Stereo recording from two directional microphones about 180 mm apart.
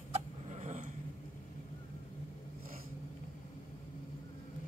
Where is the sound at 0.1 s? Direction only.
40° right (ahead or behind).